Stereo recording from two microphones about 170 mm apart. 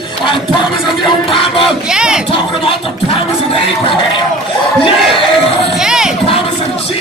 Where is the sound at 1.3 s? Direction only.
30° left (ahead or behind).